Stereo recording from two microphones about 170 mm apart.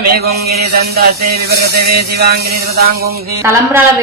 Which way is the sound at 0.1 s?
65° right (ahead or behind).